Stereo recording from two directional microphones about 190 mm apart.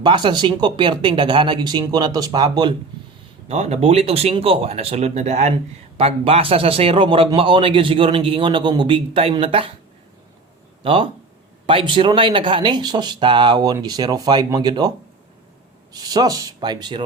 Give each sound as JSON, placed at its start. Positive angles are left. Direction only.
{"t": 0.0, "sound": "a man's voice", "side_deg": -25}
{"t": 3.5, "sound": "a man's voice", "side_deg": -35}
{"t": 10.8, "sound": "a man's voice", "side_deg": -30}